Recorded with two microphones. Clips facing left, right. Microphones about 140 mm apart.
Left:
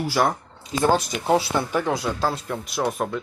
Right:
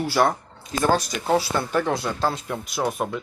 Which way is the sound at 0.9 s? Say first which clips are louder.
Even; 20° left (ahead or behind).